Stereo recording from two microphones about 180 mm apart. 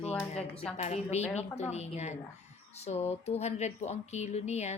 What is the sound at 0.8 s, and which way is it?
Speech, 40° left (ahead or behind).